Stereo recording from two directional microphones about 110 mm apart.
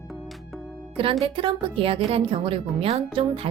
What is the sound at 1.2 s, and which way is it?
A woman's voice, 55° right (ahead or behind).